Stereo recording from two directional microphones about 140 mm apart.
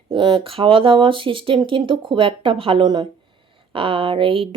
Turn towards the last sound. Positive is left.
turn(degrees=-40)  # may be behind; listen again after turning